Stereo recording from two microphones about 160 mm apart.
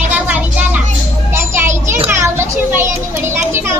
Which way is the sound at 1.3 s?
15° right (ahead or behind).